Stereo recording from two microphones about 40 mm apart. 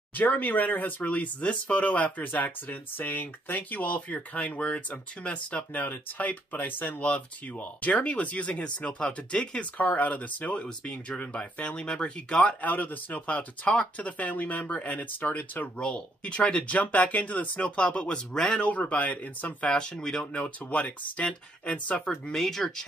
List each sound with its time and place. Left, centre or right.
0.3 s speech: left
6.7 s speech: left
7.0 s speech: left
9.6 s speech: left
12.4 s speech: left
15.8 s speech: left
17.6 s speech: left
18.1 s speech: centre
18.6 s speech: left
19.7 s speech: centre
20.3 s speech: left
22.3 s speech: centre